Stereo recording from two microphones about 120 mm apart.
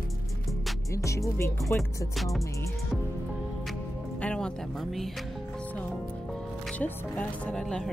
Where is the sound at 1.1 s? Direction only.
25° left (ahead or behind).